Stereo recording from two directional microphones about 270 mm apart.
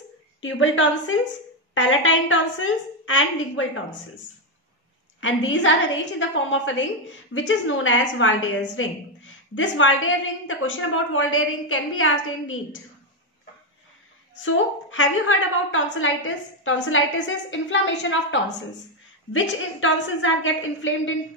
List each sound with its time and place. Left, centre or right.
0.4 s a woman's voice: left
5.2 s a woman's voice: left
14.4 s a woman's voice: left